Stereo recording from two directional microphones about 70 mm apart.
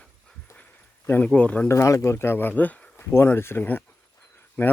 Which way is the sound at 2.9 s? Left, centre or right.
Left.